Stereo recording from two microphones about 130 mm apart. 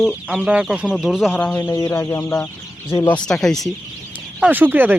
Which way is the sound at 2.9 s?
30° left (ahead or behind).